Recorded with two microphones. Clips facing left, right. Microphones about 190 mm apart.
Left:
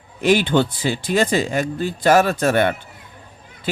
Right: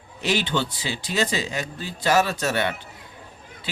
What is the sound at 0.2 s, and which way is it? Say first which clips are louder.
A man's voice: left 8 dB; 50° left (ahead or behind).